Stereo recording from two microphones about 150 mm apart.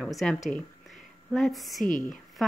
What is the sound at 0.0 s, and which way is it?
Speech, centre (ahead or behind).